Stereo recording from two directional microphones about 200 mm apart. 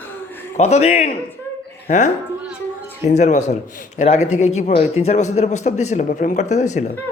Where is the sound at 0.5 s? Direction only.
35° left (ahead or behind).